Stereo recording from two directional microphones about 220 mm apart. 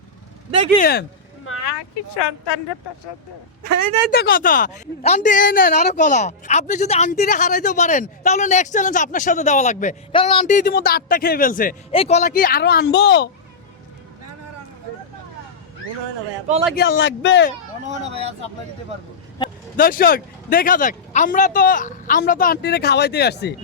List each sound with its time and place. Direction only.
0.8 s a child's voice: 45° left (ahead or behind)
1.5 s vehicle: 65° left (ahead or behind)
3.6 s a man's voice: 45° right (ahead or behind)
4.1 s a woman's voice: 40° left (ahead or behind)
11.9 s a child's voice: 25° left (ahead or behind); by 13.3 s 50° left (ahead or behind)
16.7 s a man's voice: 55° left (ahead or behind)
17.8 s speech: 30° right (ahead or behind)
19.7 s a woman's voice: 40° left (ahead or behind)